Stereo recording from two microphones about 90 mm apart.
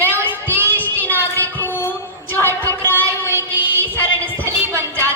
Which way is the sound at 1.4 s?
20° left (ahead or behind).